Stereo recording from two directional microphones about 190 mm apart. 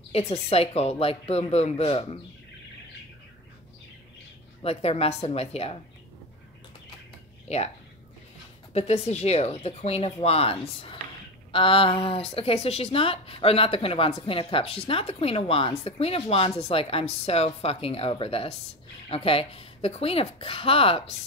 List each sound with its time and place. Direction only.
0.1 s a woman's voice: 30° left (ahead or behind)
4.6 s a woman's voice: 30° left (ahead or behind)
7.4 s speech: 35° left (ahead or behind)
8.7 s a woman's voice: 35° left (ahead or behind)